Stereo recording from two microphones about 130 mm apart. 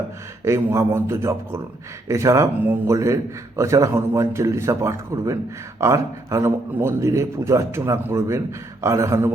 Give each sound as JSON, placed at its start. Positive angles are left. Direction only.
{"t": 0.4, "sound": "a man's voice", "side_deg": -20}